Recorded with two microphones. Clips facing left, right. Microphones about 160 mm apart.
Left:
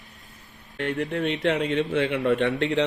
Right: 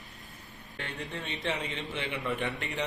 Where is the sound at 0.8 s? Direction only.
75° left (ahead or behind).